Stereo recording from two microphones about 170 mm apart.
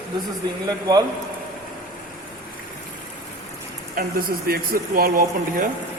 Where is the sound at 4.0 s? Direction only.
60° right (ahead or behind).